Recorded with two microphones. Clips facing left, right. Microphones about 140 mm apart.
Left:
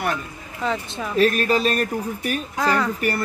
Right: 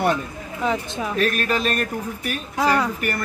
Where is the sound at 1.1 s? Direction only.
35° left (ahead or behind).